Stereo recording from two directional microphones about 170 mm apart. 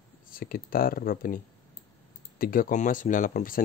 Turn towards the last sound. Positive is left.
turn(degrees=55)  # may be behind; listen again after turning